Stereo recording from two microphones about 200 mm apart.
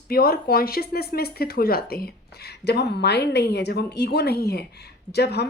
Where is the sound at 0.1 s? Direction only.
50° left (ahead or behind).